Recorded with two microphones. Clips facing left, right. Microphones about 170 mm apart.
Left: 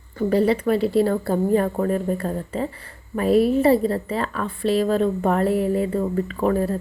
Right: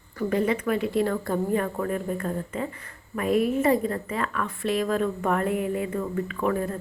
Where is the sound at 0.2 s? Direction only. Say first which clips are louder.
Left 5 dB; 35° left (ahead or behind).